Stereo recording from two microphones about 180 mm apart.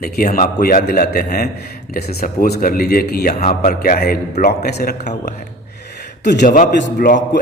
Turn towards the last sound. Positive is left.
turn(degrees=50)  # may be behind; listen again after turning